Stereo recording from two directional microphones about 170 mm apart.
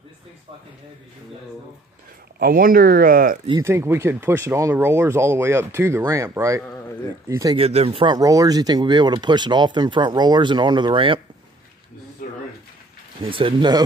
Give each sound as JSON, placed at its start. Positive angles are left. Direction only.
{"t": 2.3, "sound": "speech", "side_deg": -60}
{"t": 3.6, "sound": "speech", "side_deg": -15}
{"t": 7.5, "sound": "speech", "side_deg": -35}
{"t": 12.2, "sound": "a sound", "side_deg": 60}
{"t": 13.2, "sound": "speech", "side_deg": -30}